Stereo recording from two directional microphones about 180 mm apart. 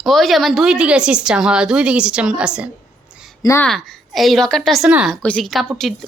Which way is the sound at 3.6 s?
Centre (ahead or behind).